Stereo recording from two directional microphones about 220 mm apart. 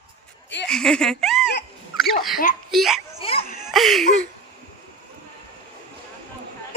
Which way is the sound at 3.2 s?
25° left (ahead or behind).